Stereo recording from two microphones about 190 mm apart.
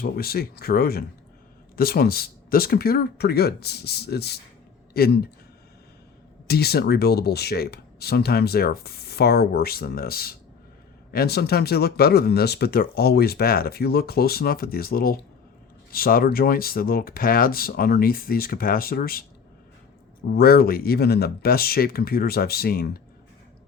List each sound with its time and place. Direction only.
0.0 s speech: 55° left (ahead or behind)
6.5 s speech: 55° left (ahead or behind)
20.3 s speech: 55° left (ahead or behind)